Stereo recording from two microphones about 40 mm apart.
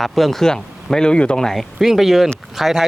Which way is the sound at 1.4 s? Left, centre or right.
Centre.